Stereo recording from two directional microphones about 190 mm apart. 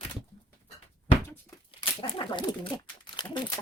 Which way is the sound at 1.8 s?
25° left (ahead or behind).